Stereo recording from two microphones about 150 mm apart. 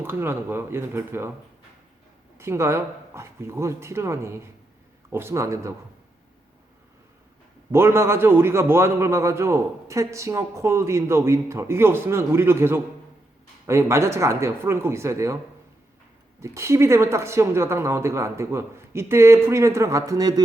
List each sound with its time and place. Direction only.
0.0 s a man's voice: 15° right (ahead or behind)
2.4 s a man's voice: 20° right (ahead or behind)
7.7 s a man's voice: 15° right (ahead or behind)
16.4 s a man's voice: 20° right (ahead or behind)